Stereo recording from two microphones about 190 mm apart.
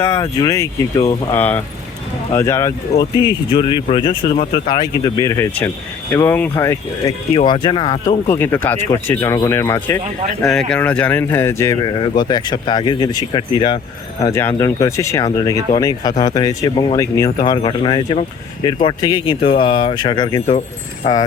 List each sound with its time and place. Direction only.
0.0 s speech: 15° left (ahead or behind)
7.3 s speech: 25° left (ahead or behind)
8.3 s speech: 15° left (ahead or behind)
10.4 s speech: 5° left (ahead or behind); by 20.6 s 25° left (ahead or behind)